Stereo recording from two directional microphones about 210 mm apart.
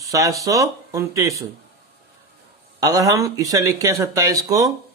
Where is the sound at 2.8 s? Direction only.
15° right (ahead or behind).